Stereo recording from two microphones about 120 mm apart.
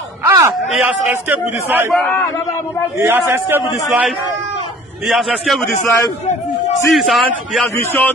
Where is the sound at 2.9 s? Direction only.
20° right (ahead or behind).